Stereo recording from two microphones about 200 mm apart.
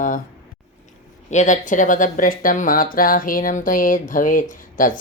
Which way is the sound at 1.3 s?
35° left (ahead or behind).